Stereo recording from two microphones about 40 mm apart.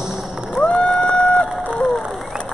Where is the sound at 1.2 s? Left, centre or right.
Left.